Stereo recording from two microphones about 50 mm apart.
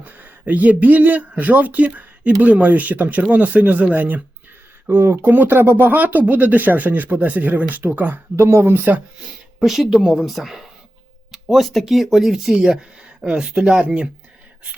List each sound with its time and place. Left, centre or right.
0.0 s speech: right
4.9 s speech: right
8.4 s speech: right
8.6 s speech: right
9.6 s speech: centre
13.7 s speech: right